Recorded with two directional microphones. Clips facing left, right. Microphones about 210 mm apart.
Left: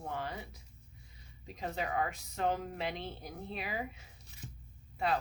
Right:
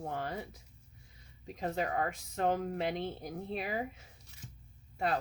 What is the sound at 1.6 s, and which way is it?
Speech, 45° right (ahead or behind).